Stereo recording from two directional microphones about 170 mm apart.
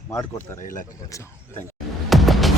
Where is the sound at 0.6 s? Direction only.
50° left (ahead or behind).